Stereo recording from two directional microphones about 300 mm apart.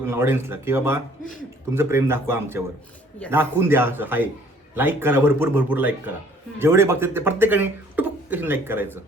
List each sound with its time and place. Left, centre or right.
0.1 s speech: centre